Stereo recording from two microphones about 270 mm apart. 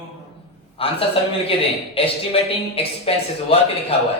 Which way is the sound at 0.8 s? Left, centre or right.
Left.